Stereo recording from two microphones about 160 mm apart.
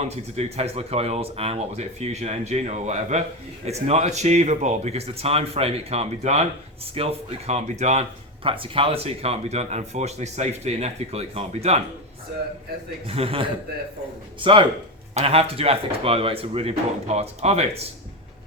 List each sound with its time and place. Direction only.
0.0 s speech: 40° right (ahead or behind)
8.4 s speech: 35° right (ahead or behind)
13.1 s speech: 35° right (ahead or behind)